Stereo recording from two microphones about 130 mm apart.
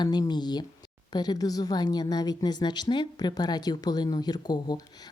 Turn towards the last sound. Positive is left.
turn(degrees=30)  # may be behind; listen again after turning